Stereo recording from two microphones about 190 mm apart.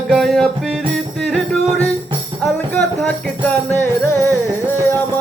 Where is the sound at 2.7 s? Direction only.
5° left (ahead or behind).